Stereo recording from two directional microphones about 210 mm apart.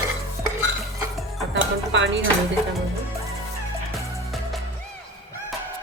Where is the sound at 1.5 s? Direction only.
60° right (ahead or behind).